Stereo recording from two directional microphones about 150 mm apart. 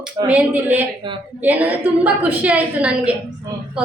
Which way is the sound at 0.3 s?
10° right (ahead or behind).